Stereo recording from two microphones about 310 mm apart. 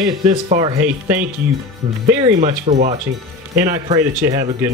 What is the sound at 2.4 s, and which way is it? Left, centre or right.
Speech, right.